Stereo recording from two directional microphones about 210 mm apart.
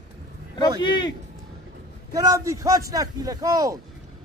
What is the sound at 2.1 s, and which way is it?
A man's voice, 15° right (ahead or behind).